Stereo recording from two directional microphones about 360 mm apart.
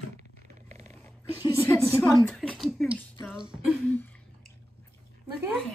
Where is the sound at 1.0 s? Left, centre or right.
Centre.